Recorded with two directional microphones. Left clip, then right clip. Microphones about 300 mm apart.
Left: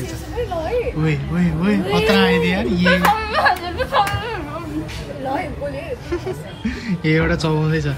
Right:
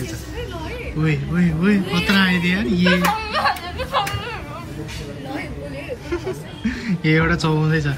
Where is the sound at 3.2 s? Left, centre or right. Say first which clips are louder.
Left 3 dB; left.